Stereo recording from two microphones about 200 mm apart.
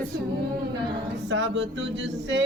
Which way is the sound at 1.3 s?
60° right (ahead or behind).